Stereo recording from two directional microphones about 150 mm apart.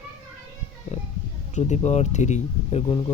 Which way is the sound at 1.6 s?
50° left (ahead or behind).